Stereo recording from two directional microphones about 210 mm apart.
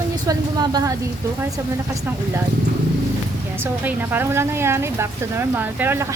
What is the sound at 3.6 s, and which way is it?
Speech, 10° right (ahead or behind).